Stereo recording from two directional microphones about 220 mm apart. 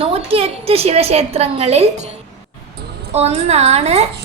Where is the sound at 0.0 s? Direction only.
25° right (ahead or behind).